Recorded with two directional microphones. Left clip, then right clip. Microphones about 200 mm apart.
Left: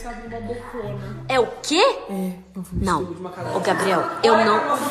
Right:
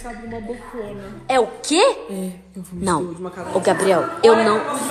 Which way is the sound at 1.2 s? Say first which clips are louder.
Right 2 dB; 5° left (ahead or behind).